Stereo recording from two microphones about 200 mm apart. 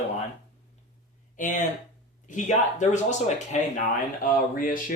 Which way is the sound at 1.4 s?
40° left (ahead or behind).